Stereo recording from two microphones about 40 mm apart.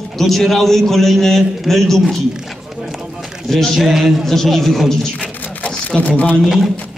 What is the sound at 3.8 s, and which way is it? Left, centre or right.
Speech, centre.